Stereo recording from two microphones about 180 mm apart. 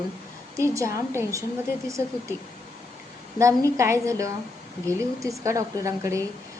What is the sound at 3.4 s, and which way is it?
A woman's voice, 15° right (ahead or behind).